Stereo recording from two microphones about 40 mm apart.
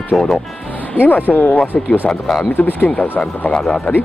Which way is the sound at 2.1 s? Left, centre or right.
Centre.